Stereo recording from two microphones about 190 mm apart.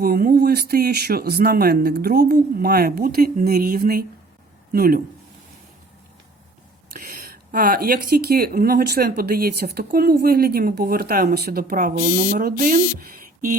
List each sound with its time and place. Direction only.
0.0 s speech: 50° right (ahead or behind)
6.9 s speech: 50° right (ahead or behind)